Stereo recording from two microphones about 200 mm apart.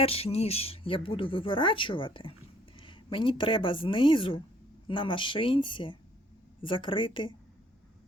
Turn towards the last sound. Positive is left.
turn(degrees=25)  # may be behind; listen again after turning